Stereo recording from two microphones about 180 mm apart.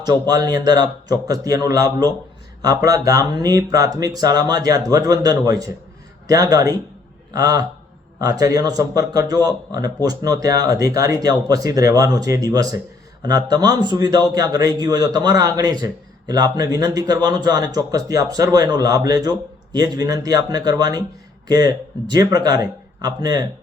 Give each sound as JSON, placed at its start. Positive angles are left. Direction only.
{"t": 0.0, "sound": "a man's voice", "side_deg": -20}